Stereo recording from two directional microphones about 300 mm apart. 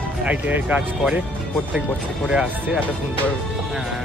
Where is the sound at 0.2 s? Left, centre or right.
Centre.